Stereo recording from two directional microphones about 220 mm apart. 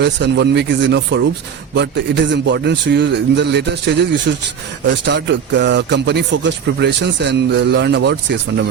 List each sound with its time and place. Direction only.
0.0 s a man's voice: 50° right (ahead or behind)